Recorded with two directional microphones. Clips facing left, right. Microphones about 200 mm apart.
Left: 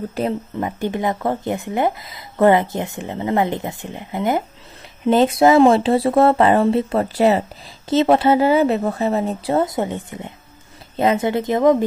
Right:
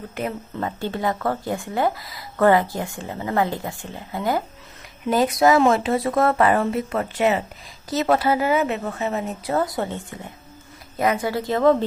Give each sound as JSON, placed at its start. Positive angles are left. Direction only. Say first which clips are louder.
{"t": 0.2, "sound": "speech", "louder": "left 5 dB", "side_deg": 35}
{"t": 0.6, "sound": "speech", "louder": "even", "side_deg": 15}